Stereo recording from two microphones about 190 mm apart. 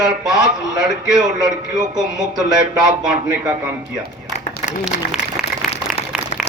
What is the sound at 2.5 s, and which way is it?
Speech, 20° right (ahead or behind).